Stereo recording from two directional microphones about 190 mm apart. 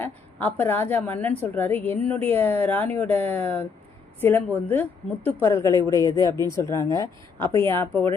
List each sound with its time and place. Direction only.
0.0 s a woman's voice: 10° left (ahead or behind)